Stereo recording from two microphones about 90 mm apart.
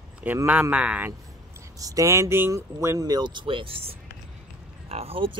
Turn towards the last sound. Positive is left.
turn(degrees=-80)